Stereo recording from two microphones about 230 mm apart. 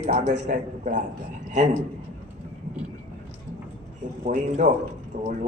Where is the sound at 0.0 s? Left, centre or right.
Right.